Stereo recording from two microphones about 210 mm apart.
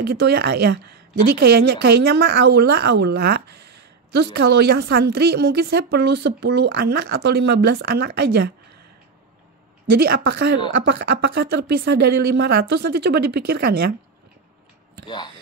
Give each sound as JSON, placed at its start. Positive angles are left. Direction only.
{"t": 0.0, "sound": "speech", "side_deg": -50}
{"t": 9.9, "sound": "speech", "side_deg": -45}